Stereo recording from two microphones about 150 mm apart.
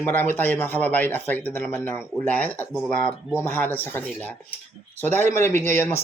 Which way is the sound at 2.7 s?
Centre (ahead or behind).